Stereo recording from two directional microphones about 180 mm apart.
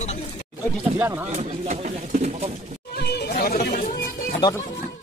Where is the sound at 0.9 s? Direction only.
10° right (ahead or behind).